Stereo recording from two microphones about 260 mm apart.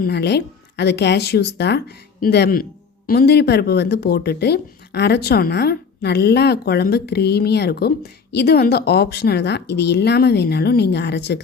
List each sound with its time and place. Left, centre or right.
0.0 s speech: left